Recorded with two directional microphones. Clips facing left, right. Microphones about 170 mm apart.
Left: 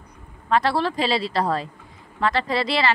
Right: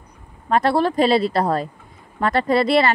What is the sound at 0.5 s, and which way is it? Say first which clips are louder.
Speech: right 3 dB; 50° right (ahead or behind).